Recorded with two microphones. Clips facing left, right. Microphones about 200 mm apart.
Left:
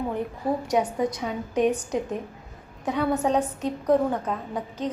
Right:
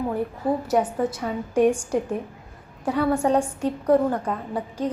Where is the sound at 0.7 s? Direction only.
5° right (ahead or behind).